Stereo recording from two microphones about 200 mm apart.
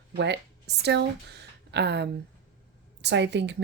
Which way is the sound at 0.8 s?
55° right (ahead or behind).